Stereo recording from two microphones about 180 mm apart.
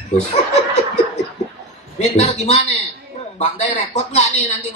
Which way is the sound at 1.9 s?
40° left (ahead or behind).